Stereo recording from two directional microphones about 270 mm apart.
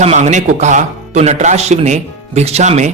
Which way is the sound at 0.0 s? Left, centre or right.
Right.